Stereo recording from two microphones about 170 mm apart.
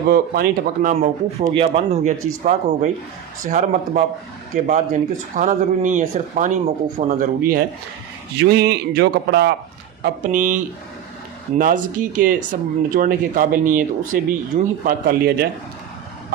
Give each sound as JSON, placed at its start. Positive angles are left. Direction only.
{"t": 0.1, "sound": "speech", "side_deg": -60}
{"t": 1.5, "sound": "speech", "side_deg": -35}
{"t": 8.4, "sound": "a man's voice", "side_deg": -75}
{"t": 10.3, "sound": "speech", "side_deg": -50}